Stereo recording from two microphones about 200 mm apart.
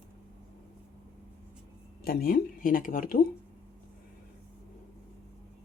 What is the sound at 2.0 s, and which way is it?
Speech, 45° left (ahead or behind).